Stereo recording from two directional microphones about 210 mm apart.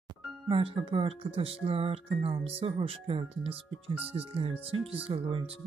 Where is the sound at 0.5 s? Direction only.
25° right (ahead or behind).